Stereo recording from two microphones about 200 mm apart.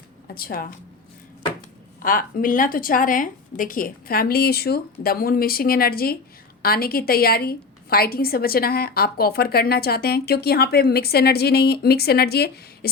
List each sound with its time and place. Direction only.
0.3 s a woman's voice: 45° left (ahead or behind)
2.0 s a woman's voice: 45° left (ahead or behind)